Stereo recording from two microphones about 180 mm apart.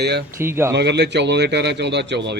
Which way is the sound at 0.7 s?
70° right (ahead or behind).